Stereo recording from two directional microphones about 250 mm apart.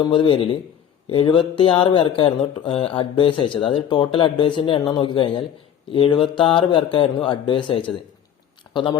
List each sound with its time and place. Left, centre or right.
0.0 s speech: centre